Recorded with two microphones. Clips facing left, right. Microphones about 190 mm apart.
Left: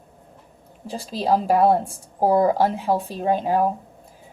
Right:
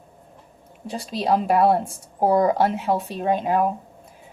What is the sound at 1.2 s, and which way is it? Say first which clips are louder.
Speech: left 1 dB; 35° left (ahead or behind).